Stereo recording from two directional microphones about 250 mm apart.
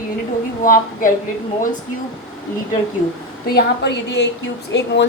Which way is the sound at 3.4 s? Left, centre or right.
Left.